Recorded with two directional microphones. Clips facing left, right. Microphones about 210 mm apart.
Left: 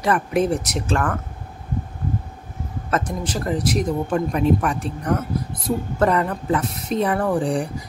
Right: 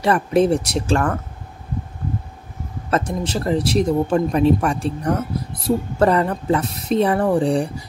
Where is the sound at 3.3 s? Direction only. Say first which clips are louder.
Right 2 dB; 25° right (ahead or behind).